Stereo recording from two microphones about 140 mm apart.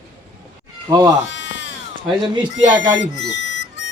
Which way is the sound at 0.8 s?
25° right (ahead or behind).